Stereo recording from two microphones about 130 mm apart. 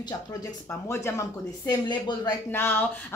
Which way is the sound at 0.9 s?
20° left (ahead or behind).